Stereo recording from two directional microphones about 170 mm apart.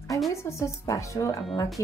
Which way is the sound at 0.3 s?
15° left (ahead or behind).